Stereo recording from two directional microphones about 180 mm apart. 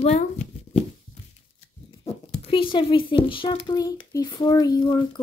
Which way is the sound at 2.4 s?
30° left (ahead or behind).